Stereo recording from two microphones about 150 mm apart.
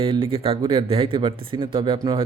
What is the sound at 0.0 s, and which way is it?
Speech, 35° right (ahead or behind).